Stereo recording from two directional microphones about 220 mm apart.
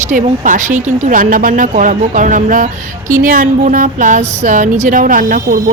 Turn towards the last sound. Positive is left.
turn(degrees=-35)  # may be behind; listen again after turning